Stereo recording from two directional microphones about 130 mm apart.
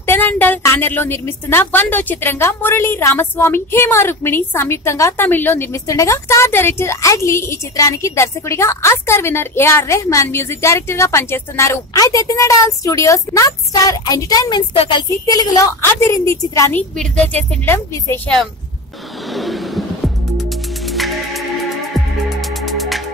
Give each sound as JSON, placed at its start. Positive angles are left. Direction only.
{"t": 0.0, "sound": "a woman's voice", "side_deg": 15}
{"t": 14.7, "sound": "speech", "side_deg": 40}
{"t": 15.2, "sound": "a woman's voice", "side_deg": 25}
{"t": 17.0, "sound": "speech", "side_deg": 10}
{"t": 19.3, "sound": "a sound", "side_deg": 0}
{"t": 20.8, "sound": "music", "side_deg": 0}
{"t": 22.7, "sound": "music", "side_deg": 0}